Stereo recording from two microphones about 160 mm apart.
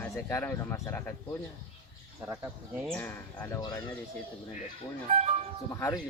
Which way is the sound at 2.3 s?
15° right (ahead or behind).